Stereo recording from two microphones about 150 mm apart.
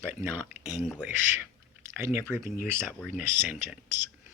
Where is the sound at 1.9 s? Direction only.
15° right (ahead or behind).